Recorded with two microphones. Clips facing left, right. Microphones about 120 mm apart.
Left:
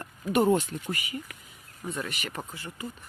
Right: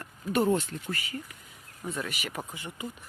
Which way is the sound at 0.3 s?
15° left (ahead or behind).